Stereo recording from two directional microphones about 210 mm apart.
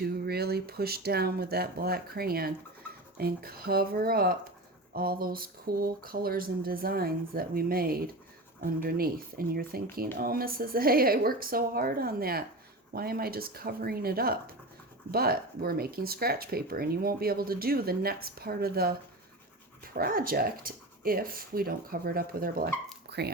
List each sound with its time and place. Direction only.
0.0 s speech: 50° right (ahead or behind)
23.0 s dog: 50° right (ahead or behind)